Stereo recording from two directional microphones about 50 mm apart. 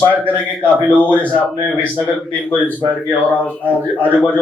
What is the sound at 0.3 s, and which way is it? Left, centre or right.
A man's voice, left.